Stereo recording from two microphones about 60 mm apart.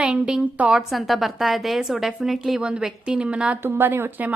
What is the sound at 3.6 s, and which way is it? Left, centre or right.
Speech, right.